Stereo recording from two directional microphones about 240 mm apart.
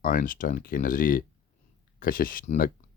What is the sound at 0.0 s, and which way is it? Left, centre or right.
Speech, left.